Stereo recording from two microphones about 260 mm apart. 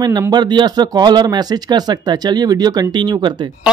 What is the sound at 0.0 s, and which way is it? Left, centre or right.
Speech, centre.